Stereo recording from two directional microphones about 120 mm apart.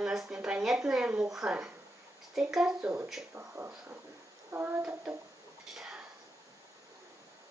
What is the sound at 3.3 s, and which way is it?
Speech, 20° right (ahead or behind).